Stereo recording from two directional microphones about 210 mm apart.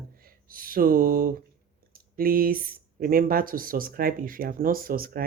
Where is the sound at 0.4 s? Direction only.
45° right (ahead or behind).